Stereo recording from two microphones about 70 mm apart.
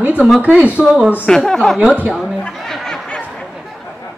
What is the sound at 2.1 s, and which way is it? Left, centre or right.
Speech, centre.